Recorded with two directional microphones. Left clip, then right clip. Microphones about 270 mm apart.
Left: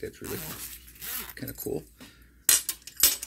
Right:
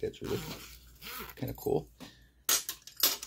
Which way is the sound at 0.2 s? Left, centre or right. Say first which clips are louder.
Right 1 dB; centre.